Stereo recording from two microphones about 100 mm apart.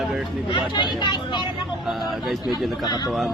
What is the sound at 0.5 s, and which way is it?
Speech, 50° left (ahead or behind).